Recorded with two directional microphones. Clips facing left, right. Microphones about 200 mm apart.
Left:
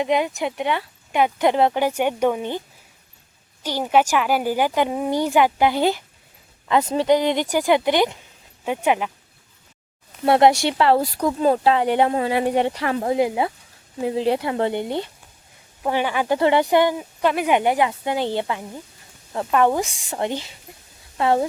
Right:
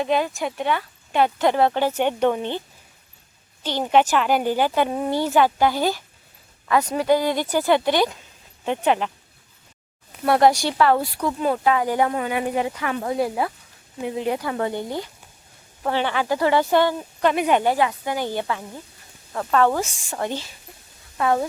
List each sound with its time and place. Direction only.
0.0 s a woman's voice: 20° left (ahead or behind)
10.2 s speech: 25° left (ahead or behind)
11.0 s speech: 40° left (ahead or behind); by 13.5 s 20° left (ahead or behind)
14.0 s speech: 30° left (ahead or behind)
15.8 s a woman's voice: 10° left (ahead or behind)